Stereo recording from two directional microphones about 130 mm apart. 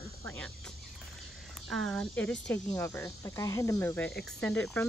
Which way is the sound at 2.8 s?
25° left (ahead or behind).